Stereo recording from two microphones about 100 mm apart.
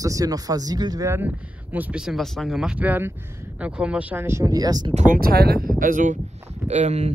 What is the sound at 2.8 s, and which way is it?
Speech, 15° right (ahead or behind).